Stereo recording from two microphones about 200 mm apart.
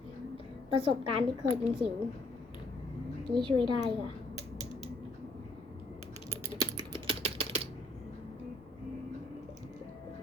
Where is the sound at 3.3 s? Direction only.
25° right (ahead or behind).